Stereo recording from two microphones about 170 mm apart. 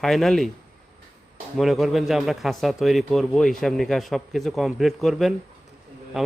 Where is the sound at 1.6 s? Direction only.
Centre (ahead or behind).